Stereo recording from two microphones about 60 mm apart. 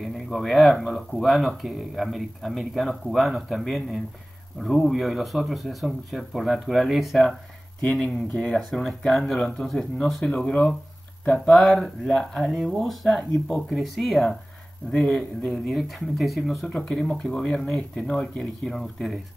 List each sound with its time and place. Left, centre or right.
0.0 s speech: centre
8.3 s speech: centre
8.5 s speech: centre
10.2 s speech: centre
11.2 s speech: centre
14.9 s speech: centre
15.7 s speech: centre